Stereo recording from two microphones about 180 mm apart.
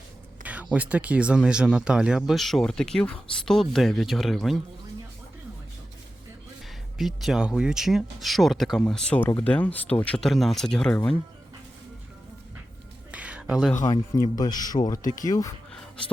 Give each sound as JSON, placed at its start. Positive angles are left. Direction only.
{"t": 0.4, "sound": "speech", "side_deg": -10}
{"t": 7.0, "sound": "speech", "side_deg": 0}
{"t": 13.1, "sound": "a sound", "side_deg": -5}
{"t": 13.8, "sound": "speech", "side_deg": 20}
{"t": 14.9, "sound": "speech", "side_deg": 45}
{"t": 15.2, "sound": "speech", "side_deg": 20}